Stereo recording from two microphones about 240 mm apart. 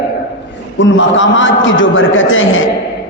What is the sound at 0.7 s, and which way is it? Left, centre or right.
A man's voice, left.